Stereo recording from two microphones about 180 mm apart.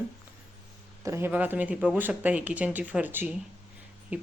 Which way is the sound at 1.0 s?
15° right (ahead or behind).